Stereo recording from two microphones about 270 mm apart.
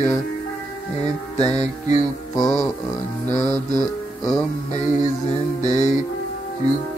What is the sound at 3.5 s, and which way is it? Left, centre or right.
Music, centre.